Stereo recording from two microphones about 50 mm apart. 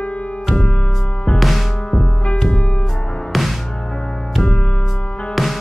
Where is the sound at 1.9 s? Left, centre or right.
Centre.